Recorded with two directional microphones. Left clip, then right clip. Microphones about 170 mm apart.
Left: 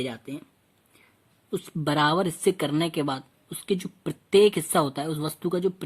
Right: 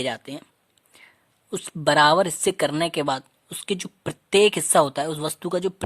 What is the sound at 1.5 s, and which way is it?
Speech, 30° right (ahead or behind).